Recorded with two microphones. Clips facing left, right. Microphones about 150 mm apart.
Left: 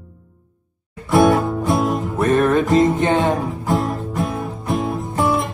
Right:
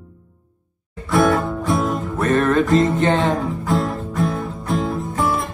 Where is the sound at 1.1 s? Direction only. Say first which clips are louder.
Left 3 dB; 20° left (ahead or behind).